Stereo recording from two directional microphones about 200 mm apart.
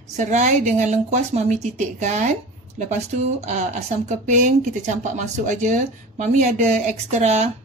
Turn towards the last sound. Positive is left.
turn(degrees=-35)  # may be behind; listen again after turning